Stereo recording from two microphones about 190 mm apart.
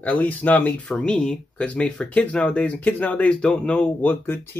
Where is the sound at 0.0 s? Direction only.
10° left (ahead or behind).